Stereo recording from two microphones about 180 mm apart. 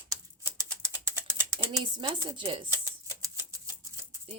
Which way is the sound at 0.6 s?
15° right (ahead or behind).